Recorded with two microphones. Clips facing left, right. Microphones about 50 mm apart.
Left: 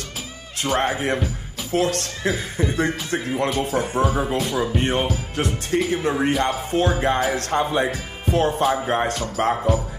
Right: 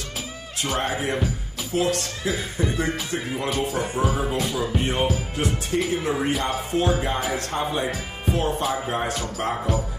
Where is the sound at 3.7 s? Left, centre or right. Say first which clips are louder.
Left 3 dB; left.